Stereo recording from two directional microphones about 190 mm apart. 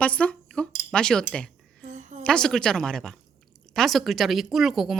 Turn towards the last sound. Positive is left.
turn(degrees=0)  # may be behind; listen again after turning